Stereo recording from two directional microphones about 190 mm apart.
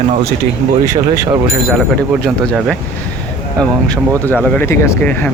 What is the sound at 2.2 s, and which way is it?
Speech, centre (ahead or behind).